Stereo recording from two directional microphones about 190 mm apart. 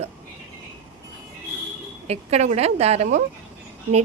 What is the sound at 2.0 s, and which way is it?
A woman's voice, 35° right (ahead or behind).